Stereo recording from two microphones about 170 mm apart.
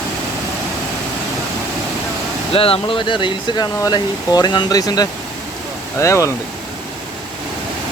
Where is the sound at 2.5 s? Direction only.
35° left (ahead or behind); by 6.3 s 15° left (ahead or behind).